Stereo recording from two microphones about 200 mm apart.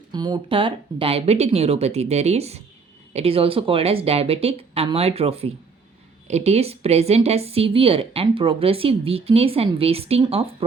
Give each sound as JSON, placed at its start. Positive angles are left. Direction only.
{"t": 0.1, "sound": "speech", "side_deg": -20}